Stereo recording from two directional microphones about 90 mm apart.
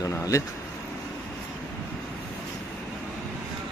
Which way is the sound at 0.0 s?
40° left (ahead or behind).